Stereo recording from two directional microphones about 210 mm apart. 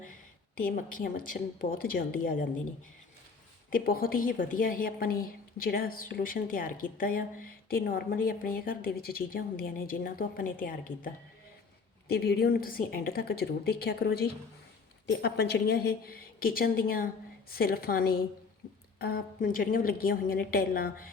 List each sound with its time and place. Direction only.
0.9 s a woman's voice: 40° left (ahead or behind)
3.7 s a woman's voice: 45° left (ahead or behind)